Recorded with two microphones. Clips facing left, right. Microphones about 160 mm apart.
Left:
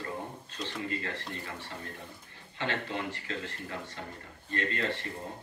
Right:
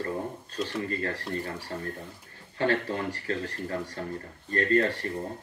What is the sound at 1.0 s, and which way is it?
Speech, 40° right (ahead or behind).